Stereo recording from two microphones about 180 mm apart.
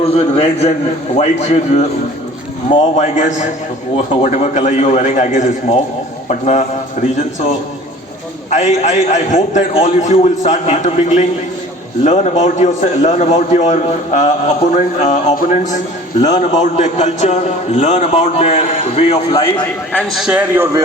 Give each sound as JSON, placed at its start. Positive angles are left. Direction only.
{"t": 0.0, "sound": "a man's voice", "side_deg": 35}
{"t": 3.0, "sound": "a man's voice", "side_deg": 45}
{"t": 19.9, "sound": "a man's voice", "side_deg": 5}
{"t": 20.2, "sound": "a man's voice", "side_deg": -10}